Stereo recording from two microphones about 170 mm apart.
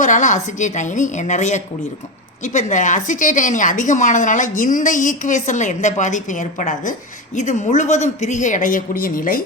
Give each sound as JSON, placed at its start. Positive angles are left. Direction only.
{"t": 0.0, "sound": "a woman's voice", "side_deg": 45}